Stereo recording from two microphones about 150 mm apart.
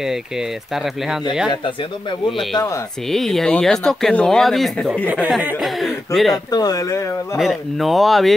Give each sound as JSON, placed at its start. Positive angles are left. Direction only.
{"t": 3.1, "sound": "speech", "side_deg": 0}
{"t": 5.0, "sound": "speech", "side_deg": -10}
{"t": 5.6, "sound": "speech", "side_deg": 0}
{"t": 6.5, "sound": "speech", "side_deg": 25}
{"t": 7.3, "sound": "speech", "side_deg": 0}